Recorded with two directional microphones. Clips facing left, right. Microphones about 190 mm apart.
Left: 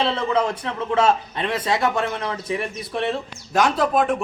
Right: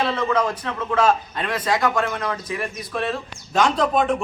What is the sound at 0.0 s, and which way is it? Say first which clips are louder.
A man's voice: even; 30° left (ahead or behind).